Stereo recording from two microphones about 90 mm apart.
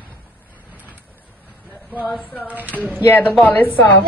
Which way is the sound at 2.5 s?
20° right (ahead or behind).